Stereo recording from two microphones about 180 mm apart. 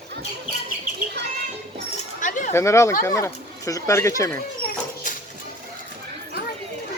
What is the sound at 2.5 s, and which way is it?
Speech, 15° left (ahead or behind).